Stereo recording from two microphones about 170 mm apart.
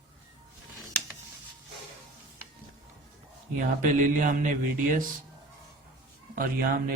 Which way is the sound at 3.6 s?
50° right (ahead or behind).